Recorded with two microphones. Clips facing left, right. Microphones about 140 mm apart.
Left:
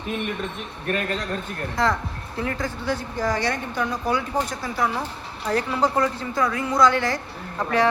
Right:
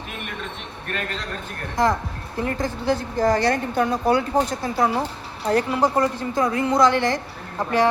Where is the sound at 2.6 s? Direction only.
45° right (ahead or behind).